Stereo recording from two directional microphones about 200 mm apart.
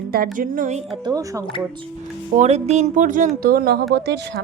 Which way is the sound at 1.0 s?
15° right (ahead or behind).